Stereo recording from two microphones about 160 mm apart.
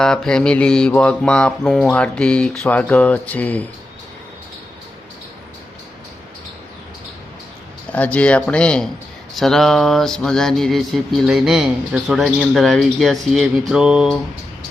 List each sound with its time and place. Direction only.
0.0 s music: 5° left (ahead or behind)
7.9 s music: 10° left (ahead or behind)
9.3 s a sound: centre (ahead or behind)